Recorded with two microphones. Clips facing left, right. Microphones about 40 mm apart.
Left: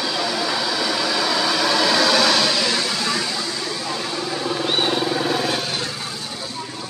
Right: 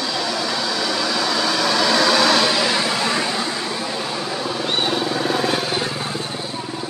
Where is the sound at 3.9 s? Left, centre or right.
Centre.